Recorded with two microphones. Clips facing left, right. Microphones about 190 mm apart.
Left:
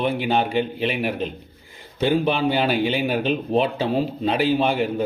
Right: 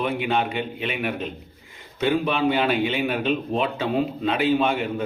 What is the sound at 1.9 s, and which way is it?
A man's voice, 30° left (ahead or behind).